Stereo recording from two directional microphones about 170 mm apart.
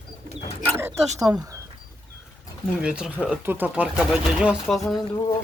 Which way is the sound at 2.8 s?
5° right (ahead or behind).